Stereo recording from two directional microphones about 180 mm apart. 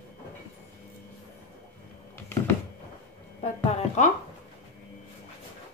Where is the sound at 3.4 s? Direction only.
40° left (ahead or behind).